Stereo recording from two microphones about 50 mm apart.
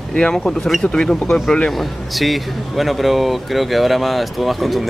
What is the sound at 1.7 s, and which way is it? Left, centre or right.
Speech, centre.